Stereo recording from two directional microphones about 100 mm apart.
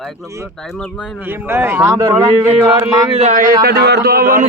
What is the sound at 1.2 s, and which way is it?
Speech, 20° right (ahead or behind).